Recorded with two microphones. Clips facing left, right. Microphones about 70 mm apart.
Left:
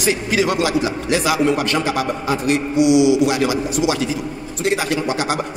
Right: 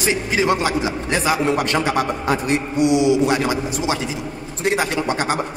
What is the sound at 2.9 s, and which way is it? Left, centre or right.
A man's voice, right.